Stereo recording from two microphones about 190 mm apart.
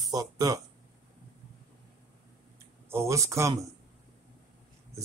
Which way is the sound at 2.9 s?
15° right (ahead or behind).